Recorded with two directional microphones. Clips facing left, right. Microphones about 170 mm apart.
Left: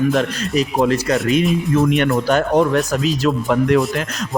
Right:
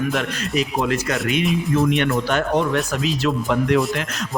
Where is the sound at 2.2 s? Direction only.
40° left (ahead or behind).